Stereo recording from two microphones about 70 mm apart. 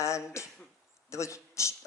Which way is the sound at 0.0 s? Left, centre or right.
Left.